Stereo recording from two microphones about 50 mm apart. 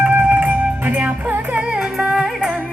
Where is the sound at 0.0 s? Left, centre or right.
Right.